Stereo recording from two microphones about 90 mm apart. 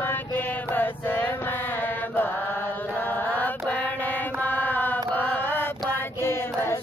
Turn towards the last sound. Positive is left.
turn(degrees=30)  # may be behind; listen again after turning